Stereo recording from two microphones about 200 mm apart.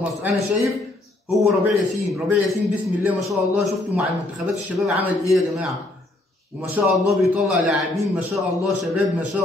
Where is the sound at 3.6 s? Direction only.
Centre (ahead or behind).